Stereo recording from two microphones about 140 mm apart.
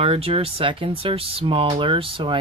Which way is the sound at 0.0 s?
45° right (ahead or behind).